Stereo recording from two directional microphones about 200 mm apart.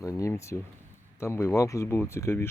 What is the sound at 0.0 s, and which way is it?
Speech, 15° left (ahead or behind).